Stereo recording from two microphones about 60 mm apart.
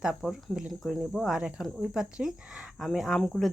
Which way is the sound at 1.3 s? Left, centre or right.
Centre.